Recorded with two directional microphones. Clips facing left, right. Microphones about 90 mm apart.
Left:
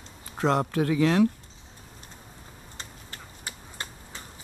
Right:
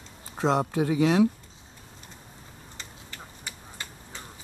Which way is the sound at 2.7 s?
40° left (ahead or behind).